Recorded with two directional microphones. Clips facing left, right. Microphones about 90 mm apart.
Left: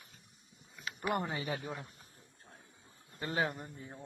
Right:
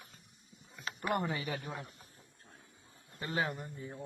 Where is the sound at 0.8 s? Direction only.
35° right (ahead or behind).